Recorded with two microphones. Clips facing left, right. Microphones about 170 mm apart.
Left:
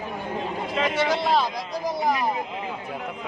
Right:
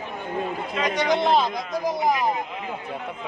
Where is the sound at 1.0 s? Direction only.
20° right (ahead or behind).